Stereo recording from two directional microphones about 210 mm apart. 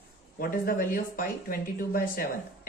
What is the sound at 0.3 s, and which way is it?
Speech, 45° left (ahead or behind).